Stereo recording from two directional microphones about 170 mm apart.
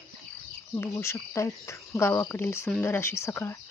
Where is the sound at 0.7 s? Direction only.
15° left (ahead or behind).